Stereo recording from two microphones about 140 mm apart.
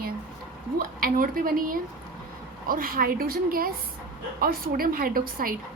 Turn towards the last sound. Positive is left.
turn(degrees=-90)